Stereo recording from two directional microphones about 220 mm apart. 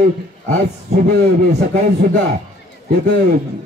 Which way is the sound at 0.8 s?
45° right (ahead or behind).